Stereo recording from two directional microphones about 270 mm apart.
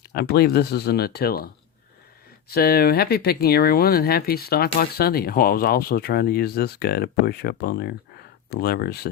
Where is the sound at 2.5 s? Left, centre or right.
Left.